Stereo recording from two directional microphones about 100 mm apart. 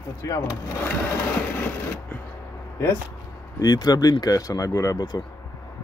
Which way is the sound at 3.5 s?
40° left (ahead or behind).